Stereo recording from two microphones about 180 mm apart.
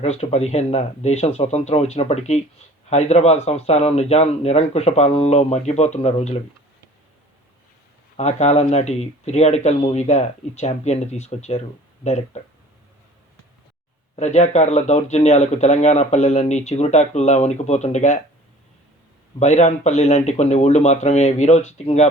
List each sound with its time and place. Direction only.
0.0 s speech: 35° left (ahead or behind)
8.1 s speech: 40° left (ahead or behind)
14.2 s speech: 40° left (ahead or behind)
19.4 s speech: 40° left (ahead or behind)